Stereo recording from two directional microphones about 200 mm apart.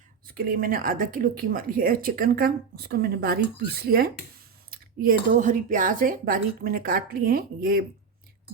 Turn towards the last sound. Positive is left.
turn(degrees=-45)  # may be behind; listen again after turning